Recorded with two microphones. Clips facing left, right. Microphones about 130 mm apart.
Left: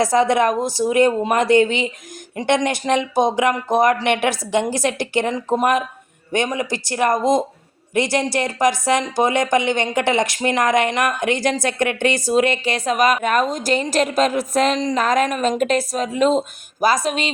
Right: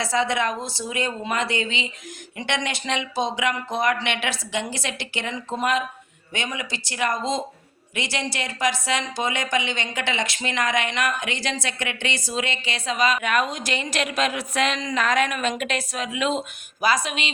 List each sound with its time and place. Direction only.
0.0 s speech: 45° left (ahead or behind)